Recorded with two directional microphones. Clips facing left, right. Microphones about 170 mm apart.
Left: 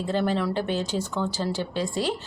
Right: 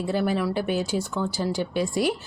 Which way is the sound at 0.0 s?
10° right (ahead or behind).